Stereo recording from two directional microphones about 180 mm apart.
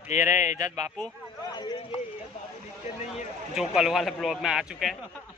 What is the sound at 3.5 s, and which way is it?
Speech, centre (ahead or behind).